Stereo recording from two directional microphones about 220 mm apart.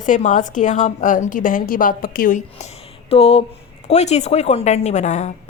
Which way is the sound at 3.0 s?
30° left (ahead or behind).